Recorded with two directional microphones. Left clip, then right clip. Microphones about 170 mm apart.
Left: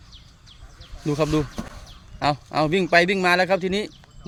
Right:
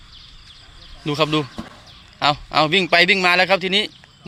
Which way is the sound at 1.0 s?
15° left (ahead or behind).